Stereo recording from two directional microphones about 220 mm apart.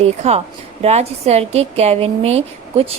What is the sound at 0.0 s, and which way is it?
A woman's voice, 30° right (ahead or behind).